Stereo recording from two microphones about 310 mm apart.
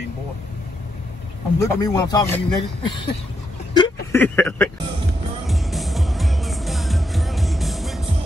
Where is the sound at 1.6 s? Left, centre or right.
Centre.